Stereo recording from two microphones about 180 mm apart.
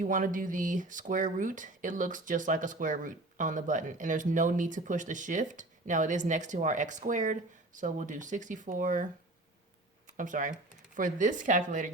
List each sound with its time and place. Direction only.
0.0 s speech: 50° right (ahead or behind)
10.2 s speech: 45° right (ahead or behind)